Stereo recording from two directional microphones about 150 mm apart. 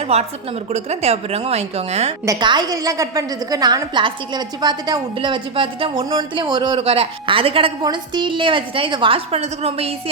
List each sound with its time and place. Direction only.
0.0 s a woman's voice: 45° right (ahead or behind)
2.2 s a woman's voice: 25° right (ahead or behind); by 9.9 s 40° right (ahead or behind)